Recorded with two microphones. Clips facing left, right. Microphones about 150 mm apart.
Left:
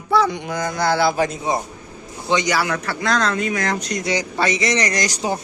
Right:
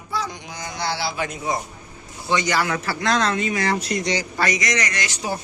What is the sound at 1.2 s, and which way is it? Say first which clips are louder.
Speech: left 5 dB; 30° left (ahead or behind).